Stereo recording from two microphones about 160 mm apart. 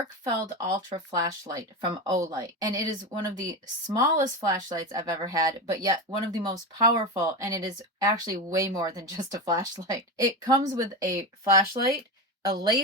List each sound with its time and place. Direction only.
0.3 s speech: 25° right (ahead or behind)
12.5 s speech: 25° right (ahead or behind)